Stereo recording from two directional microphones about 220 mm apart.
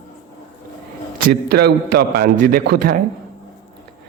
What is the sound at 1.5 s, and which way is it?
A man's voice, 45° right (ahead or behind).